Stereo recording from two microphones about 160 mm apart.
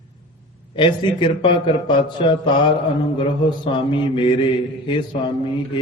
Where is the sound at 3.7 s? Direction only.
30° left (ahead or behind).